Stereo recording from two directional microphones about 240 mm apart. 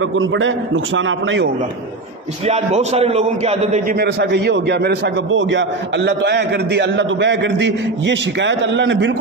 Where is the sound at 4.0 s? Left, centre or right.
Right.